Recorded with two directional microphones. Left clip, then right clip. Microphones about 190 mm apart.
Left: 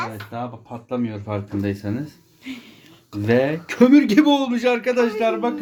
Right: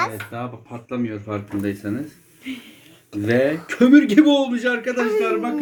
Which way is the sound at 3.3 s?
50° left (ahead or behind).